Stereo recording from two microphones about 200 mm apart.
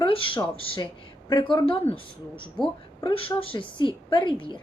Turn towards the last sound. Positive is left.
turn(degrees=25)  # may be behind; listen again after turning